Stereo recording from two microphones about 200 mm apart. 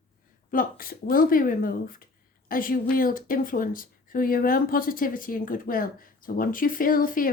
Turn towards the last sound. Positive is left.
turn(degrees=45)  # may be behind; listen again after turning